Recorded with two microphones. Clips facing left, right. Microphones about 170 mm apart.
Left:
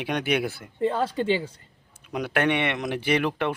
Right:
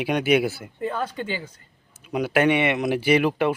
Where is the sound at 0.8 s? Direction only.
30° left (ahead or behind).